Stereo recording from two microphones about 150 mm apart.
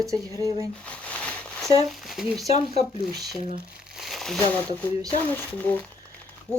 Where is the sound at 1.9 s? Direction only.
Centre (ahead or behind).